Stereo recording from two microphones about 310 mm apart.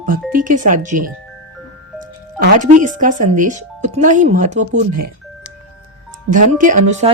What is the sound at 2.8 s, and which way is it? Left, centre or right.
Speech, right.